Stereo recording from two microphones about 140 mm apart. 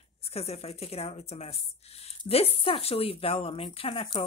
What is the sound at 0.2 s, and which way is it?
Speech, 45° left (ahead or behind).